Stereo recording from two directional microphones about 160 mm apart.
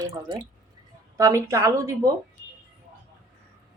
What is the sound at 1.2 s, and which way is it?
Speech, 20° right (ahead or behind).